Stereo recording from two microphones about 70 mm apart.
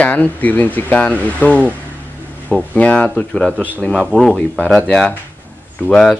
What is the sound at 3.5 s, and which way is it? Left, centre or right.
Speech, right.